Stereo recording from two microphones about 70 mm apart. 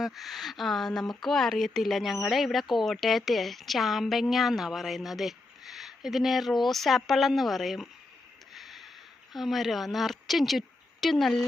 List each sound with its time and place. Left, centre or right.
0.0 s a woman's voice: centre
8.5 s a sound: centre
9.3 s a woman's voice: centre